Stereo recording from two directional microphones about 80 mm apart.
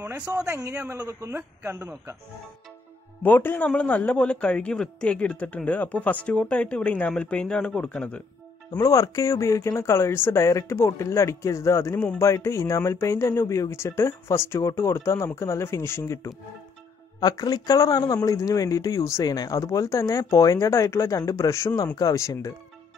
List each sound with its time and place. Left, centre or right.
0.5 s speech: right
3.2 s speech: left
8.7 s speech: left
17.2 s speech: left